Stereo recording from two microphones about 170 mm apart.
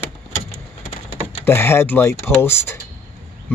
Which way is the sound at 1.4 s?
15° left (ahead or behind).